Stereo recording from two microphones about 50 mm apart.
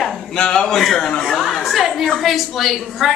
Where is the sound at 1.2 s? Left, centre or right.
Centre.